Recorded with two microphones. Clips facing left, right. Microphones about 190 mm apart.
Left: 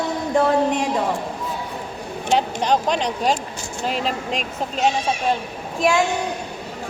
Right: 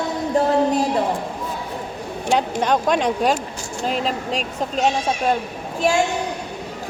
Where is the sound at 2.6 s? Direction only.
50° right (ahead or behind).